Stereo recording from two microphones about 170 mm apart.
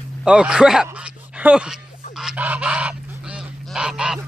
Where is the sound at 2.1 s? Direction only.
5° right (ahead or behind).